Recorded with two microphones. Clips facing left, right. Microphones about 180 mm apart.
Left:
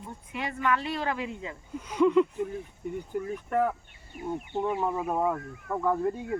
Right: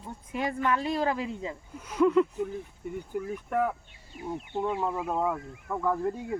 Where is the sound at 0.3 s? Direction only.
40° right (ahead or behind).